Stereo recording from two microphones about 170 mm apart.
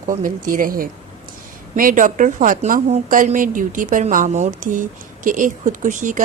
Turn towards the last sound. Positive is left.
turn(degrees=-50)  # may be behind; listen again after turning